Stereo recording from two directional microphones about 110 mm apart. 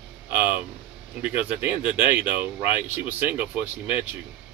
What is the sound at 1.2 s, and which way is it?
Speech, 15° right (ahead or behind).